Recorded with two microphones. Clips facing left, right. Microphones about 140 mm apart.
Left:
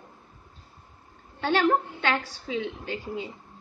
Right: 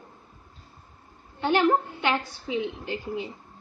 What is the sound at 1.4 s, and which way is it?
Speech, 15° right (ahead or behind).